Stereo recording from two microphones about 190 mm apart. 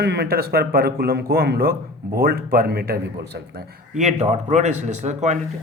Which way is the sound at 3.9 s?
35° right (ahead or behind).